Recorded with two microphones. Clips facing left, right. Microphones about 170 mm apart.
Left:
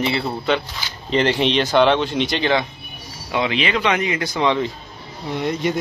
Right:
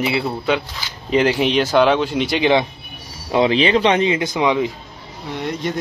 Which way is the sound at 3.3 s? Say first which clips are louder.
Right 6 dB; 35° right (ahead or behind).